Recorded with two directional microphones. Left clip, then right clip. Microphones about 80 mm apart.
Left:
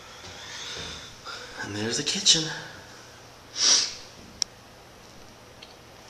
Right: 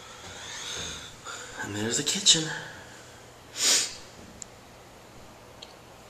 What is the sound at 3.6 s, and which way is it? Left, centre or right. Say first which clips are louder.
Snort: left 3 dB; right.